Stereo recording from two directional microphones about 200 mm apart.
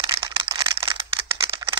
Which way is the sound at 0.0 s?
25° right (ahead or behind).